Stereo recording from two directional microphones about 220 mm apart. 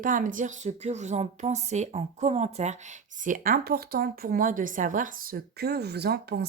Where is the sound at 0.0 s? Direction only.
35° right (ahead or behind).